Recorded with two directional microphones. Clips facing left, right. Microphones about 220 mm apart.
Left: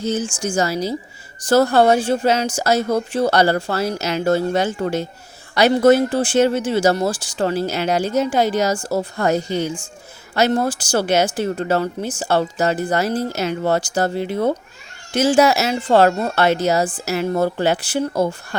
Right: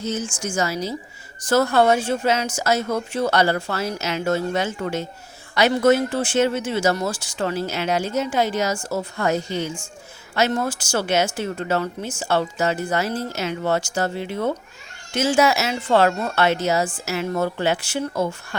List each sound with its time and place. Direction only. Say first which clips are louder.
0.0 s speech: left 4 dB; 30° left (ahead or behind)